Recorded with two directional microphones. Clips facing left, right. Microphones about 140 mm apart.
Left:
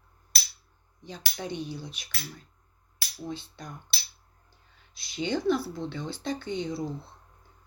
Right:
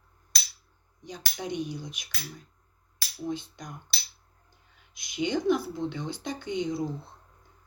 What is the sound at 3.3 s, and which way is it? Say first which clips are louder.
Speech: right 4 dB; 15° right (ahead or behind).